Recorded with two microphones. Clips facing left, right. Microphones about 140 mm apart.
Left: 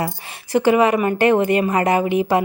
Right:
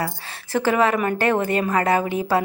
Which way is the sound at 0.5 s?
15° left (ahead or behind).